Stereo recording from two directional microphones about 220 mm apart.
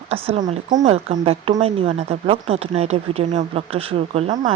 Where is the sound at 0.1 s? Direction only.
30° right (ahead or behind).